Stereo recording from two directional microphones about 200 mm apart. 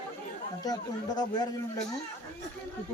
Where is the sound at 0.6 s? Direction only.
20° left (ahead or behind).